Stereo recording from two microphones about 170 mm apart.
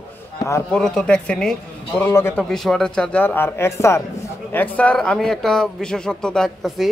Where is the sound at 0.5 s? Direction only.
15° left (ahead or behind).